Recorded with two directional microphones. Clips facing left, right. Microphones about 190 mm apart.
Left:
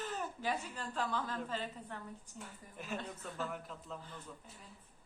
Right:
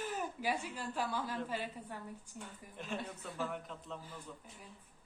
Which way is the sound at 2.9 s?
10° right (ahead or behind).